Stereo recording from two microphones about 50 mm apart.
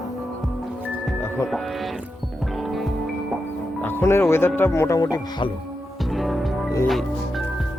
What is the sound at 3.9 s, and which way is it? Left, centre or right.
Speech, left.